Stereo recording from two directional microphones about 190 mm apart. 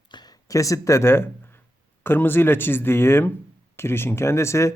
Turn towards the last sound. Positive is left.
turn(degrees=15)  # may be behind; listen again after turning